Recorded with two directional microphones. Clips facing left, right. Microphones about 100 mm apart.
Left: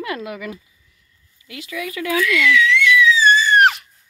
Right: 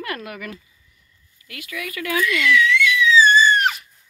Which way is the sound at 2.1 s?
90° left.